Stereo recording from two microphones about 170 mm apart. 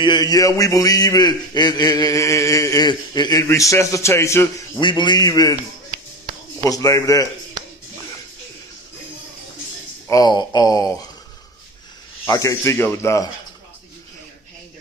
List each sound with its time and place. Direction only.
0.0 s a man's voice: 25° left (ahead or behind)
4.7 s a man's voice: 25° left (ahead or behind)
6.6 s a man's voice: 20° left (ahead or behind)
10.0 s a man's voice: 20° left (ahead or behind)
12.3 s speech: 20° left (ahead or behind)